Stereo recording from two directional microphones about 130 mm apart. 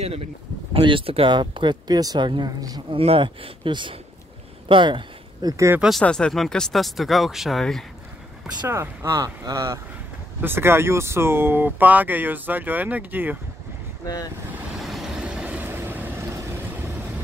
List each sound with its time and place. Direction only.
0.7 s speech: 40° right (ahead or behind)
3.0 s speech: 45° right (ahead or behind); by 5.7 s 30° right (ahead or behind)
5.8 s speech: centre (ahead or behind)
8.6 s speech: 20° right (ahead or behind)
14.0 s speech: 30° left (ahead or behind)
14.8 s vehicle: centre (ahead or behind); by 16.9 s 20° right (ahead or behind)